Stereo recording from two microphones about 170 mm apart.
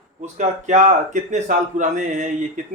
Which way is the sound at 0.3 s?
45° right (ahead or behind).